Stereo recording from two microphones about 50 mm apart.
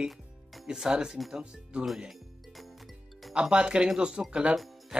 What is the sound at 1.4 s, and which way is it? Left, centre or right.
Speech, centre.